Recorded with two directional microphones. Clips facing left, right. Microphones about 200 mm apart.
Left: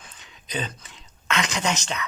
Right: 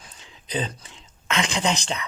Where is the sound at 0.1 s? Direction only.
30° right (ahead or behind).